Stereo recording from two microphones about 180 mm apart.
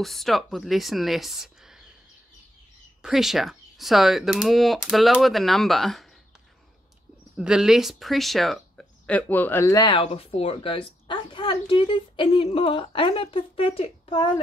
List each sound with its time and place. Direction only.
0.0 s speech: centre (ahead or behind)
3.0 s speech: centre (ahead or behind)
7.3 s speech: 5° right (ahead or behind); by 9.8 s 15° left (ahead or behind)
9.8 s a woman's voice: 30° left (ahead or behind)